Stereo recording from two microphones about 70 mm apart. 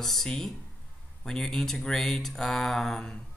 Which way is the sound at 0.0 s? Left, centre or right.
Centre.